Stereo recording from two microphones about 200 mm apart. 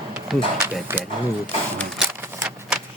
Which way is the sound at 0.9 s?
10° right (ahead or behind).